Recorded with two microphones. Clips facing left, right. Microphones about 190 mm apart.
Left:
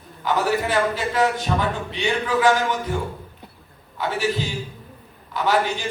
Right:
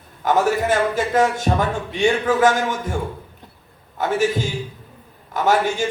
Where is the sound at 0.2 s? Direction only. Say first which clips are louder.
Right 3 dB; 45° right (ahead or behind).